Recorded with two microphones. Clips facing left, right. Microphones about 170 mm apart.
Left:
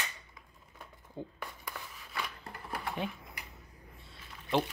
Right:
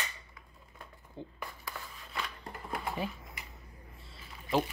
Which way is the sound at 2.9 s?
Centre (ahead or behind).